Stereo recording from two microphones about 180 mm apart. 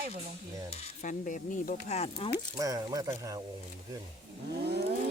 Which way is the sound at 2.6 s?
20° right (ahead or behind).